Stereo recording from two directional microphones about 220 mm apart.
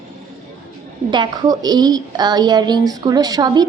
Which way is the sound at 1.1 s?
20° right (ahead or behind).